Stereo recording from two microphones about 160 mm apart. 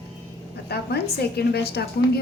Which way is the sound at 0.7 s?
90° left.